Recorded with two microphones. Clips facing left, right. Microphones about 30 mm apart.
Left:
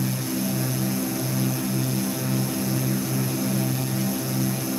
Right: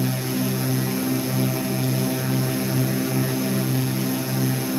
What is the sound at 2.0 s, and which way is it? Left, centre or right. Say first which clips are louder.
Vehicle: right 2 dB; centre.